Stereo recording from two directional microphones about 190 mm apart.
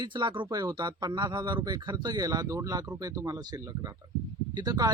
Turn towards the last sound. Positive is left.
turn(degrees=-20)  # may be behind; listen again after turning